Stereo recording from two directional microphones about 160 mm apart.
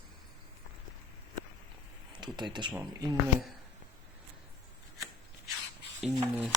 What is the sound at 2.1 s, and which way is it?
Speech, 25° right (ahead or behind).